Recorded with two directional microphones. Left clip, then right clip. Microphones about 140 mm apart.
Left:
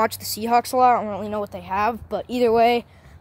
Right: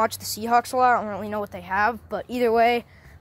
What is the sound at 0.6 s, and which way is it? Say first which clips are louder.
Speech: left 3 dB; 25° left (ahead or behind).